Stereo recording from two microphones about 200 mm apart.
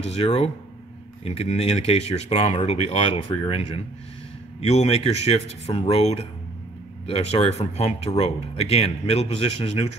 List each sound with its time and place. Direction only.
0.0 s speech: 30° left (ahead or behind)